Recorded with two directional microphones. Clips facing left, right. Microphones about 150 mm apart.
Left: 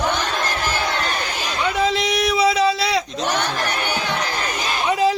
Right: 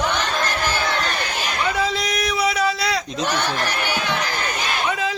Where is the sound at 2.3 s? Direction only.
25° left (ahead or behind).